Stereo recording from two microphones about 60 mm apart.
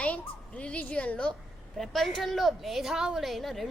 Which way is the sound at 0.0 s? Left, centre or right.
Left.